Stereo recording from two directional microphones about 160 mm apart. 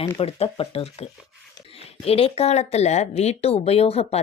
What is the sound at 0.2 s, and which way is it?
A woman's voice, 40° left (ahead or behind).